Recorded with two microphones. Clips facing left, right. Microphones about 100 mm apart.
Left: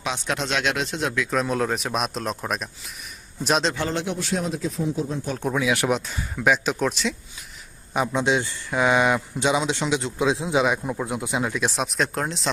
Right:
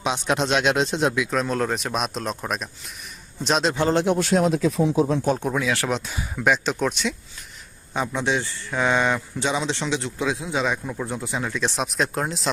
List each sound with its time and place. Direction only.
0.0 s speech: 20° right (ahead or behind)
1.3 s speech: centre (ahead or behind)
3.8 s speech: 45° right (ahead or behind); by 5.3 s 85° right
5.4 s speech: centre (ahead or behind)
5.6 s speech: 15° left (ahead or behind)
6.1 s speech: centre (ahead or behind)
7.9 s speech: 15° left (ahead or behind); by 12.5 s centre (ahead or behind)